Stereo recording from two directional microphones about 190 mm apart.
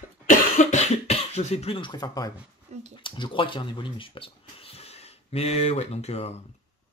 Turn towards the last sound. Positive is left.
turn(degrees=35)  # may be behind; listen again after turning